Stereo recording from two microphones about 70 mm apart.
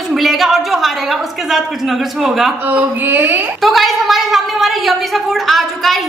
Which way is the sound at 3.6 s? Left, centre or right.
Centre.